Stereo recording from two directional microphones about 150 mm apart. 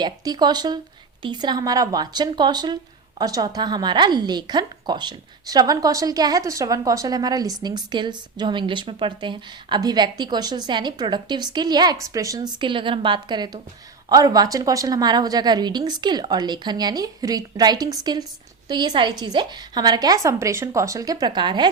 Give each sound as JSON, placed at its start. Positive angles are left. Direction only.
{"t": 0.0, "sound": "speech", "side_deg": -30}